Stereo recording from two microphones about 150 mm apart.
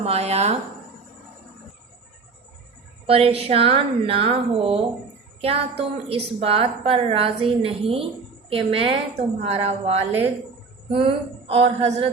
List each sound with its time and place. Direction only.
0.0 s speech: 45° right (ahead or behind)
3.1 s a woman's voice: 40° right (ahead or behind)